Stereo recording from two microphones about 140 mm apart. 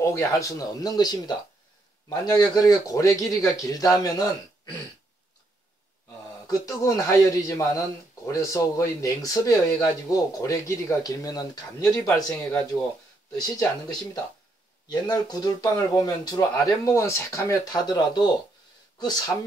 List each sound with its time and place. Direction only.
0.0 s speech: 20° left (ahead or behind)
6.4 s speech: 25° left (ahead or behind)
13.4 s speech: 30° left (ahead or behind)